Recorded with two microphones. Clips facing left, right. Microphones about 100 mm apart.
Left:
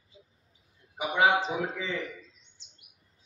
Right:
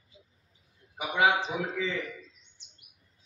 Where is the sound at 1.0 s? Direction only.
30° left (ahead or behind).